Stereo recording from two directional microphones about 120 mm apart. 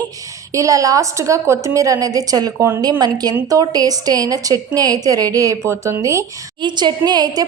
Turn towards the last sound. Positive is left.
turn(degrees=-35)  # may be behind; listen again after turning